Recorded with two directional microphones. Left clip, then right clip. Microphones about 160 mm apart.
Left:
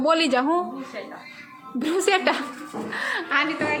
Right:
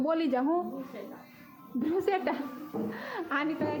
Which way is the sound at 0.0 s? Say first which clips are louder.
Left 9 dB; 10° left (ahead or behind).